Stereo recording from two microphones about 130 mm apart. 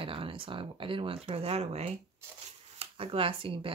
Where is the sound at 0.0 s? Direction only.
45° right (ahead or behind).